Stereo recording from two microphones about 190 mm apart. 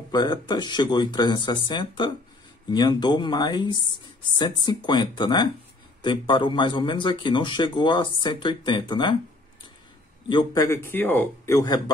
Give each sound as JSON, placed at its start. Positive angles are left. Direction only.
{"t": 0.1, "sound": "speech", "side_deg": 20}
{"t": 10.2, "sound": "a man's voice", "side_deg": 20}